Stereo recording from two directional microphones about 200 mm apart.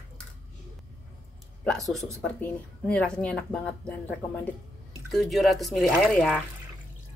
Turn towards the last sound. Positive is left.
turn(degrees=0)  # may be behind; listen again after turning